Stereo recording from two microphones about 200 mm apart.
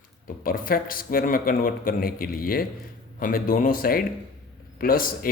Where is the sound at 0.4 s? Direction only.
45° left (ahead or behind).